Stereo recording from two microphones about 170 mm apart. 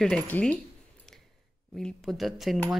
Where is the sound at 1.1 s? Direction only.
5° left (ahead or behind).